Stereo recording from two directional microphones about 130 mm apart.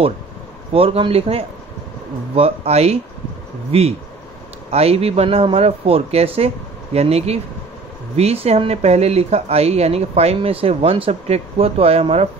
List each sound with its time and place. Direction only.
0.7 s speech: 45° right (ahead or behind)